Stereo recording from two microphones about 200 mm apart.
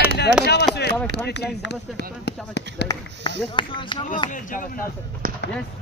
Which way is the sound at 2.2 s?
55° left (ahead or behind).